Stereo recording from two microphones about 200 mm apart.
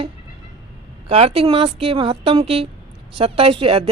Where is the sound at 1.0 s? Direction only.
30° right (ahead or behind).